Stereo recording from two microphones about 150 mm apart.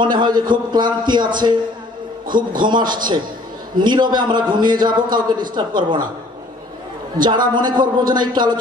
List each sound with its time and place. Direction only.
0.0 s a man's voice: 30° right (ahead or behind)
2.8 s a man's voice: 70° right (ahead or behind)
3.7 s a man's voice: 30° right (ahead or behind)
7.2 s a man's voice: 30° right (ahead or behind)